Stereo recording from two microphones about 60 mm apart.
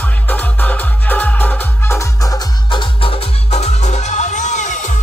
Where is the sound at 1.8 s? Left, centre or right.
Left.